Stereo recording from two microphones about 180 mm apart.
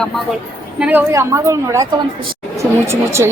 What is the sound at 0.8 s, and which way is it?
A woman's voice, 10° right (ahead or behind).